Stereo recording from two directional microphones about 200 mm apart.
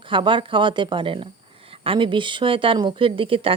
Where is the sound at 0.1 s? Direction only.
25° right (ahead or behind).